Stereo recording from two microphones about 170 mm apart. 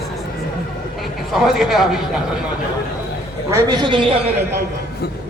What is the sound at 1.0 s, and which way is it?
A man's voice, centre (ahead or behind).